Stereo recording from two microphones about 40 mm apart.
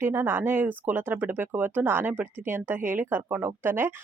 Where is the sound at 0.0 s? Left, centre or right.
Right.